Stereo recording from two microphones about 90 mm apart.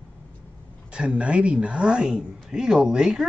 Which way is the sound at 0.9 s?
10° right (ahead or behind).